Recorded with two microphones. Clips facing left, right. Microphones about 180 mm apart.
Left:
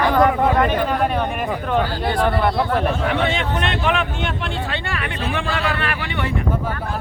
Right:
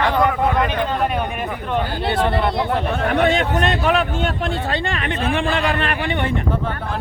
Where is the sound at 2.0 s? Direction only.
25° right (ahead or behind).